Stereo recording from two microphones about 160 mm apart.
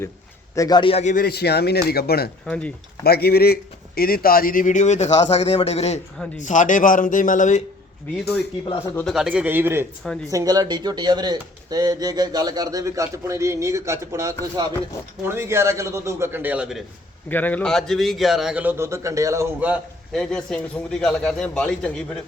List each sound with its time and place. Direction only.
0.5 s a man's voice: 25° left (ahead or behind)
1.1 s speech: 80° left
2.5 s speech: 5° left (ahead or behind)
3.0 s speech: 80° left; by 7.6 s 50° left (ahead or behind)
9.0 s a man's voice: centre (ahead or behind)
17.2 s a man's voice: 10° left (ahead or behind); by 19.8 s 10° right (ahead or behind)
20.1 s a man's voice: 5° left (ahead or behind)